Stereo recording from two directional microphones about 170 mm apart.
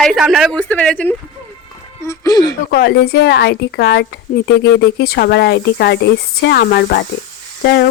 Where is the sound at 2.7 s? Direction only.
65° left (ahead or behind).